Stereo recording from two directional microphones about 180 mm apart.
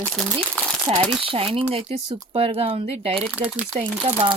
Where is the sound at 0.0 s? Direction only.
5° left (ahead or behind).